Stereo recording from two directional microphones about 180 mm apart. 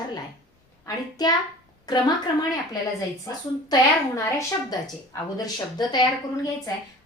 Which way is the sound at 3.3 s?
20° left (ahead or behind).